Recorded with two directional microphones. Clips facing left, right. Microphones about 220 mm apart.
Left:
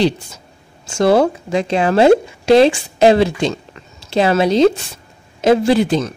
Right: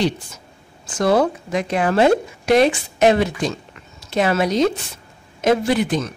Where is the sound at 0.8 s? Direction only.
30° left (ahead or behind).